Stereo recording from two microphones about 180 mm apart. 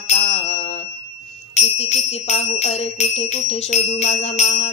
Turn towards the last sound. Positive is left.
turn(degrees=40)  # may be behind; listen again after turning